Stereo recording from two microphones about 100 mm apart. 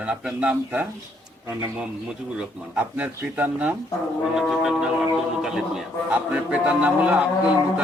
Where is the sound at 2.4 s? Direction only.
15° right (ahead or behind).